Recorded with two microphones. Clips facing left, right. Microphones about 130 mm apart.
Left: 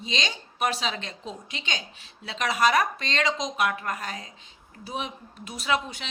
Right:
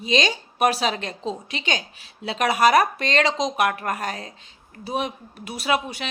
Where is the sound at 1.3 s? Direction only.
70° right (ahead or behind).